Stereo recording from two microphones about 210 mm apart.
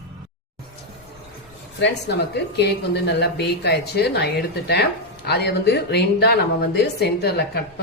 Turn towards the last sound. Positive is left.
turn(degrees=50)  # may be behind; listen again after turning